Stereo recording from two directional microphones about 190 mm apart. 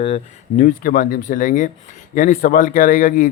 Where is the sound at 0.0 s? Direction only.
35° left (ahead or behind).